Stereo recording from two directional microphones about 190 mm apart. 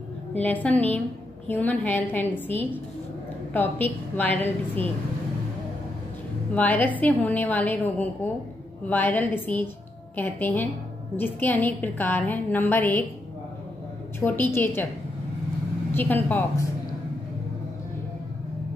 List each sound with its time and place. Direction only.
0.4 s a woman's voice: 10° left (ahead or behind)
6.5 s a woman's voice: 10° left (ahead or behind)
14.2 s a woman's voice: 10° left (ahead or behind)
15.9 s a woman's voice: 10° left (ahead or behind)